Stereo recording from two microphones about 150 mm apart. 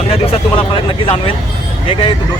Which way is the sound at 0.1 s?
35° left (ahead or behind).